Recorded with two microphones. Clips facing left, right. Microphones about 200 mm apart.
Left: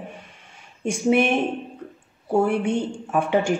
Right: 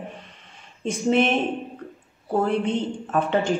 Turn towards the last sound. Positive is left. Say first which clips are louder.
# left 1 dB
turn(degrees=10)  # may be behind; listen again after turning